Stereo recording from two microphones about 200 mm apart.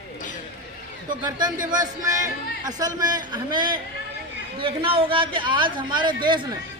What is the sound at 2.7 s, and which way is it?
A woman's voice, 20° right (ahead or behind).